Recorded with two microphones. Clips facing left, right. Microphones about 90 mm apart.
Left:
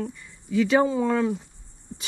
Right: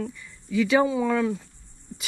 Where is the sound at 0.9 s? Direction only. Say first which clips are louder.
Left 1 dB; 25° left (ahead or behind).